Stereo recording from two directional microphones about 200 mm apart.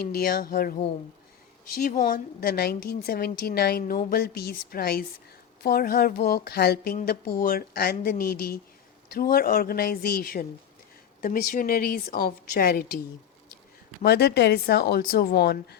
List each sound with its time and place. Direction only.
0.0 s a woman's voice: 50° left (ahead or behind)
1.8 s a woman's voice: 40° left (ahead or behind)
14.0 s a woman's voice: 55° left (ahead or behind)